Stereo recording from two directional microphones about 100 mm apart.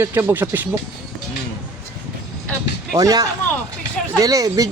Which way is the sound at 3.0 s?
35° right (ahead or behind).